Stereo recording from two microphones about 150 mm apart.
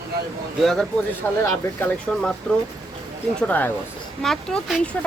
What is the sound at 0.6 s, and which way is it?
Speech, centre (ahead or behind).